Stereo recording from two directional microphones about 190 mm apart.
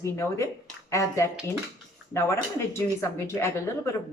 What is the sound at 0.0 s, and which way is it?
A woman's voice, 15° left (ahead or behind).